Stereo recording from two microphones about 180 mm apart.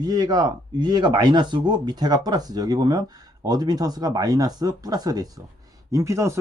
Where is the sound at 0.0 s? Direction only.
20° right (ahead or behind).